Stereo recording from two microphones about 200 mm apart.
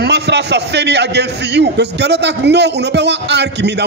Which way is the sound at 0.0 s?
60° right (ahead or behind).